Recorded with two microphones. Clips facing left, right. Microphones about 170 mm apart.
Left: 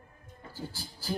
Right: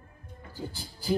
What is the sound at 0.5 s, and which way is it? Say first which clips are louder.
Speech: right 3 dB; 15° right (ahead or behind).